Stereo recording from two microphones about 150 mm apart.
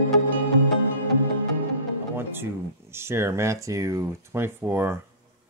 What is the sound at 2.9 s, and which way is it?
Speech, 15° right (ahead or behind).